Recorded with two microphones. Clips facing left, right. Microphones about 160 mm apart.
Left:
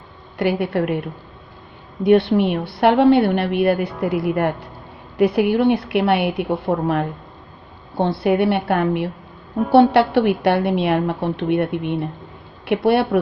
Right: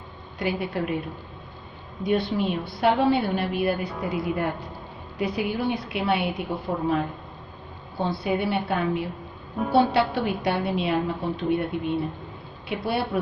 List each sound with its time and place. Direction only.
0.4 s a woman's voice: 65° left (ahead or behind)
2.0 s a woman's voice: 65° left (ahead or behind)
8.2 s a woman's voice: 65° left (ahead or behind)